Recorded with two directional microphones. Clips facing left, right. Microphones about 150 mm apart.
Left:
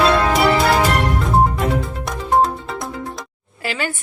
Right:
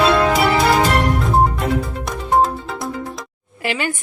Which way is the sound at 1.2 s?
Centre (ahead or behind).